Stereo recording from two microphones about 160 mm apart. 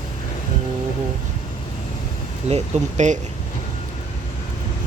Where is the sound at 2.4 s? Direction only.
45° right (ahead or behind).